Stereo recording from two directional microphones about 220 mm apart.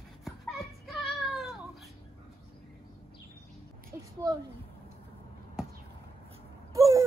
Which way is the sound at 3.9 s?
15° right (ahead or behind).